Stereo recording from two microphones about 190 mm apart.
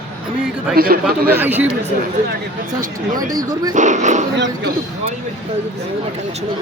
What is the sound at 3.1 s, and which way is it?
A man's voice, 45° right (ahead or behind).